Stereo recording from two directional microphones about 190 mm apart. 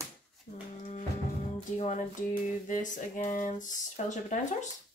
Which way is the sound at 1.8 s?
40° left (ahead or behind).